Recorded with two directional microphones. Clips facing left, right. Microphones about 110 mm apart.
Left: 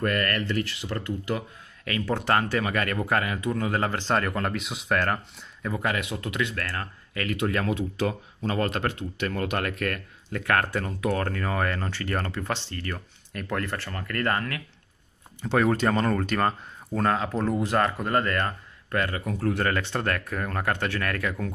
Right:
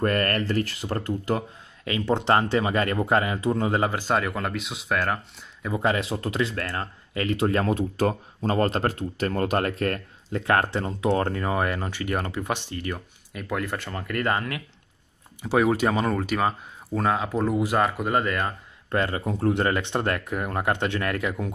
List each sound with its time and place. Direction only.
0.0 s speech: 35° right (ahead or behind)
1.9 s speech: 20° right (ahead or behind)
3.8 s speech: 10° right (ahead or behind)
5.7 s speech: 25° right (ahead or behind)
6.6 s speech: 20° right (ahead or behind)
7.3 s speech: 35° right (ahead or behind); by 18.5 s 10° right (ahead or behind)
18.9 s speech: 25° right (ahead or behind)